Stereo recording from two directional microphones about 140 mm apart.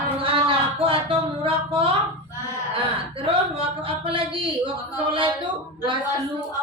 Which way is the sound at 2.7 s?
40° right (ahead or behind).